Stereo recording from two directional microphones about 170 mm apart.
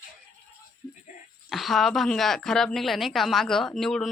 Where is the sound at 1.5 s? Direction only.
Centre (ahead or behind).